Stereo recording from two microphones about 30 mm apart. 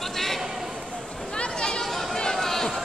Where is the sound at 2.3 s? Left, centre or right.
Centre.